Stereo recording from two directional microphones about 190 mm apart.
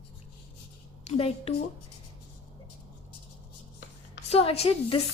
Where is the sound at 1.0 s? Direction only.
30° left (ahead or behind).